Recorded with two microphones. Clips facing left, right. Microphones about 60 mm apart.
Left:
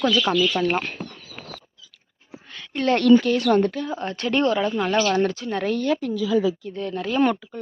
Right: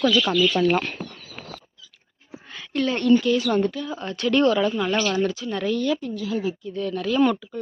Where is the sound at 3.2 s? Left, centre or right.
Left.